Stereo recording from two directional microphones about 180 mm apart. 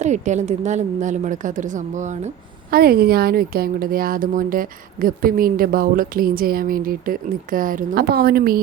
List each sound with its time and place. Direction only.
0.0 s a woman's voice: 40° right (ahead or behind)